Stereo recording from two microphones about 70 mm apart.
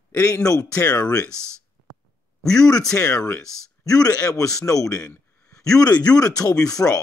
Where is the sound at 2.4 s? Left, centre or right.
Centre.